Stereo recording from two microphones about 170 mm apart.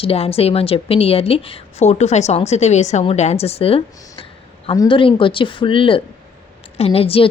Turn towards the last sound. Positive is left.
turn(degrees=35)  # may be behind; listen again after turning